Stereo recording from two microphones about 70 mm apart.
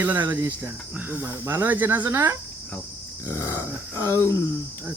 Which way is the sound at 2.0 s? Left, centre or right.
Right.